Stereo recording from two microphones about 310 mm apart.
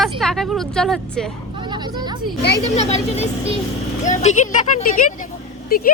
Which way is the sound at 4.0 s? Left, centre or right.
Left.